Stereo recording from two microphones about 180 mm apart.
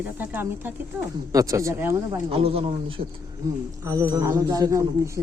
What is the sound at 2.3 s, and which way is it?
Speech, 30° right (ahead or behind).